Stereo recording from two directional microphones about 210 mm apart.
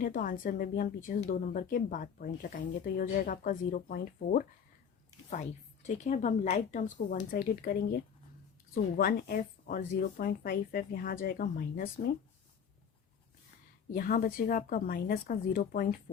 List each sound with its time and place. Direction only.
0.0 s a woman's voice: 40° left (ahead or behind)
13.9 s a woman's voice: 40° left (ahead or behind)